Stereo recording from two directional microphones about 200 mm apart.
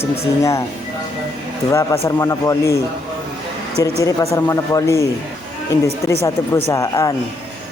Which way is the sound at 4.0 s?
15° left (ahead or behind).